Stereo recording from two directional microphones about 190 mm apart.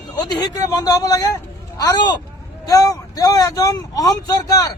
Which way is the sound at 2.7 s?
20° left (ahead or behind).